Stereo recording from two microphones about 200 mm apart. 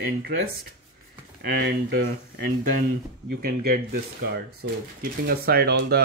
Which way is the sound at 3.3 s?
50° right (ahead or behind).